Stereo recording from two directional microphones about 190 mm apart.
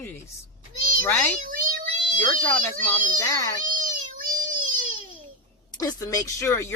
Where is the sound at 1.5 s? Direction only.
45° right (ahead or behind).